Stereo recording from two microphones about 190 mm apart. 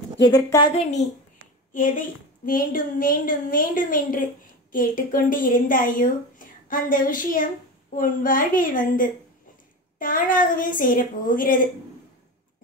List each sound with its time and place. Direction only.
0.3 s a woman's voice: 20° left (ahead or behind)
1.7 s a woman's voice: 45° left (ahead or behind)